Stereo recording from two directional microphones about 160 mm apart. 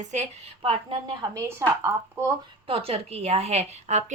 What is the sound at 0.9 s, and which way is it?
A woman's voice, 25° right (ahead or behind).